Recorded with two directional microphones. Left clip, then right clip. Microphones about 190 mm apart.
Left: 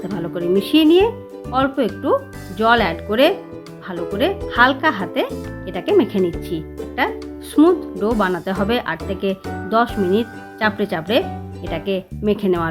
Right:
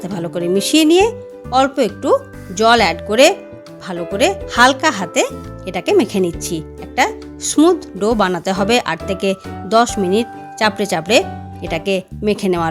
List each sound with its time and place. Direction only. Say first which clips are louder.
0.1 s speech: right 1 dB; 40° right (ahead or behind)